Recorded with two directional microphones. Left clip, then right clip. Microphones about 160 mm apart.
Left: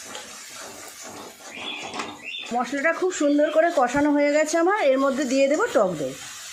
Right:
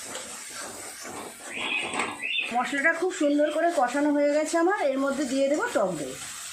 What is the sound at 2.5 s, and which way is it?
A woman's voice, 60° left (ahead or behind).